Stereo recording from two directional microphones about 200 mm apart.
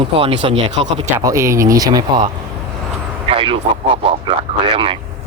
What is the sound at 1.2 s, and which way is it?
Speech, 15° right (ahead or behind).